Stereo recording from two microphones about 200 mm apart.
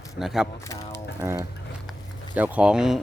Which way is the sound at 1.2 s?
15° right (ahead or behind).